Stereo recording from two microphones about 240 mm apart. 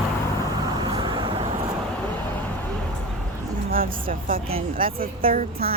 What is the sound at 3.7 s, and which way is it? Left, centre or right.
Speech, right.